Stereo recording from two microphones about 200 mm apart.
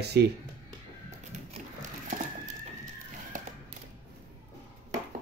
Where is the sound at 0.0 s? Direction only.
55° right (ahead or behind).